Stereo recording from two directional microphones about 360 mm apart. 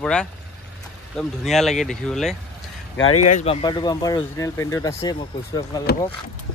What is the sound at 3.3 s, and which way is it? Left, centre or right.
Speech, centre.